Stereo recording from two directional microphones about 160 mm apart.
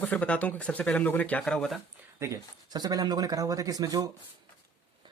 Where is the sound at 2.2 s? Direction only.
25° right (ahead or behind).